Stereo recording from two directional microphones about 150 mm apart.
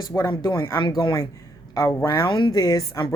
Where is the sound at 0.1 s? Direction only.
20° left (ahead or behind).